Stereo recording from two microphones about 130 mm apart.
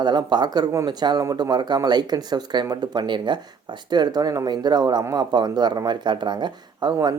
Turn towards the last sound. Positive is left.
turn(degrees=-35)  # may be behind; listen again after turning